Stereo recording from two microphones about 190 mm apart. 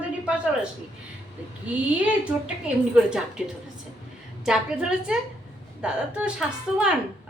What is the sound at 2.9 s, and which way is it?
Speech, 5° right (ahead or behind).